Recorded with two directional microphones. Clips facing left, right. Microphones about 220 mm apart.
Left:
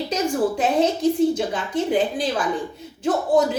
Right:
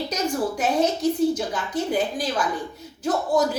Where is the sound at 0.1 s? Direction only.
30° left (ahead or behind).